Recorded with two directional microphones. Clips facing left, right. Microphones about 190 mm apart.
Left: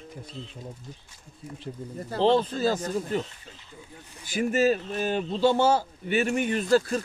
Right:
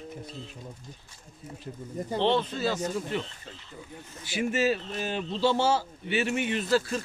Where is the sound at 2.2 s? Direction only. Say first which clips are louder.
Left 5 dB; 40° left (ahead or behind).